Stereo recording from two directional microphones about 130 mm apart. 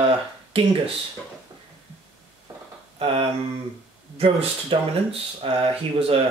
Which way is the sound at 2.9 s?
45° right (ahead or behind).